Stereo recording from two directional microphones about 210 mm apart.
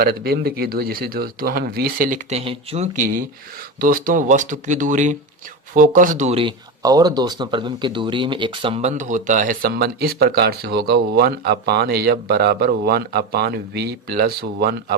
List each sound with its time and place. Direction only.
0.0 s speech: 45° right (ahead or behind)